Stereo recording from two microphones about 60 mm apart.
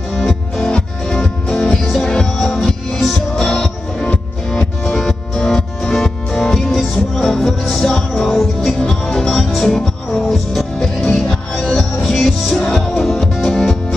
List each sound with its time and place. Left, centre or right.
0.1 s music: centre
0.7 s music: centre
4.1 s music: left
4.9 s music: centre